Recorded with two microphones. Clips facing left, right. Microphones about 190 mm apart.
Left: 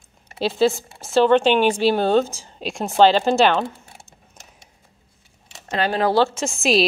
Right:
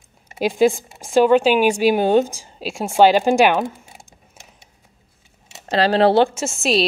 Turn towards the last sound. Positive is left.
turn(degrees=0)  # may be behind; listen again after turning